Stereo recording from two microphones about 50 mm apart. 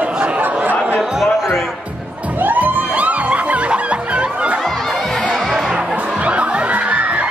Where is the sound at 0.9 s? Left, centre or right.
Centre.